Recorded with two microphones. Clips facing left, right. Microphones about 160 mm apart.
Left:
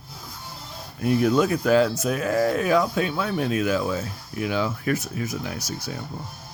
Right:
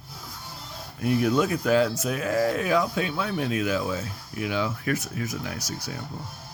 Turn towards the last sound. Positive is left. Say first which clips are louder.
# left 2 dB
turn(degrees=25)  # may be behind; listen again after turning